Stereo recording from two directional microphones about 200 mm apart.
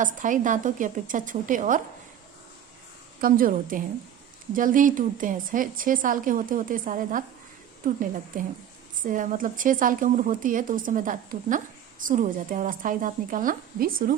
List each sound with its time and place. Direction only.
0.0 s a woman's voice: 40° right (ahead or behind)
3.2 s a woman's voice: 45° right (ahead or behind)